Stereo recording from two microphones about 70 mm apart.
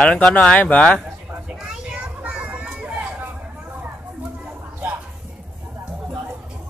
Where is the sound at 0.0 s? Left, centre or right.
Centre.